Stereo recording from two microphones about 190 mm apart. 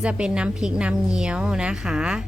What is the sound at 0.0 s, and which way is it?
A woman's voice, 5° right (ahead or behind).